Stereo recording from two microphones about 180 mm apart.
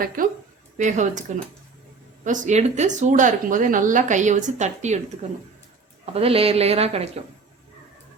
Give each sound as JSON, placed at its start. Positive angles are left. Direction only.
{"t": 0.2, "sound": "speech", "side_deg": -50}
{"t": 2.2, "sound": "speech", "side_deg": -45}
{"t": 6.1, "sound": "speech", "side_deg": -35}